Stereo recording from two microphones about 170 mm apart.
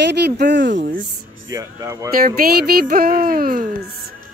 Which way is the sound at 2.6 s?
60° right (ahead or behind).